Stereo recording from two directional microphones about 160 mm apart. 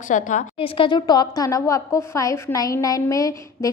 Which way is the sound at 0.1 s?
50° left (ahead or behind).